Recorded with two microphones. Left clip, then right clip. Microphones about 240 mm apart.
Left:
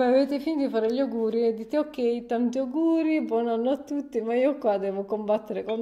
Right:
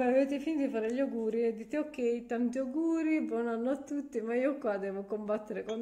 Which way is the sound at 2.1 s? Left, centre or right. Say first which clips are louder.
Left 7 dB; left.